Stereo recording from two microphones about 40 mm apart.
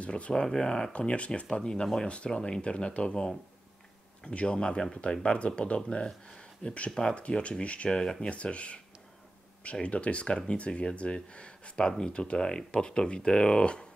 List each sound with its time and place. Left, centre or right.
0.0 s speech: left
0.3 s speech: centre
0.9 s speech: left
1.5 s speech: centre
6.9 s speech: left
7.9 s speech: centre
9.8 s speech: left